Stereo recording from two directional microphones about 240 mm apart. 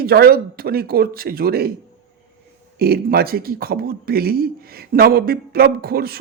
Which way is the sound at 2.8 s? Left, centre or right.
Right.